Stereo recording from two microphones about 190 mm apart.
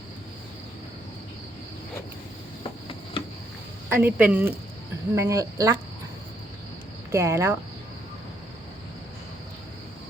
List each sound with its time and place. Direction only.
3.8 s a woman's voice: 10° right (ahead or behind)
7.1 s a woman's voice: 15° right (ahead or behind)